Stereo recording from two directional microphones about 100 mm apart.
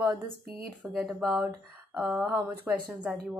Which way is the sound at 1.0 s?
15° right (ahead or behind).